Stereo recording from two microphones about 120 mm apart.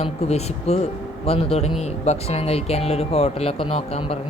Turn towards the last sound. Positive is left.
turn(degrees=55)  # may be behind; listen again after turning